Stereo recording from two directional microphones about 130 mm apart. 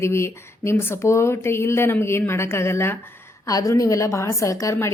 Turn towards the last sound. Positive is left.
turn(degrees=20)  # may be behind; listen again after turning